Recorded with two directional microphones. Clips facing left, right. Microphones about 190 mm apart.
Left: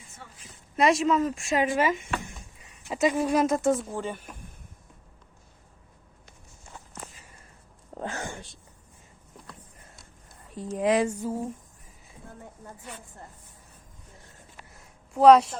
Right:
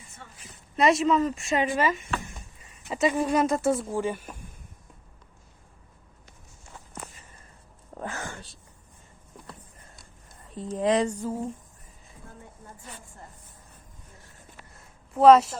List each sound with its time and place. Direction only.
0.8 s speech: centre (ahead or behind)
1.7 s speech: 15° left (ahead or behind)
2.9 s speech: centre (ahead or behind)
3.7 s speech: 10° right (ahead or behind)
7.9 s whispering: 20° left (ahead or behind)
10.8 s a sound: 5° left (ahead or behind)
14.7 s a sound: centre (ahead or behind)